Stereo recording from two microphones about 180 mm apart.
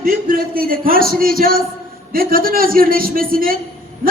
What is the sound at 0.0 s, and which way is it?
A man's voice, 50° right (ahead or behind).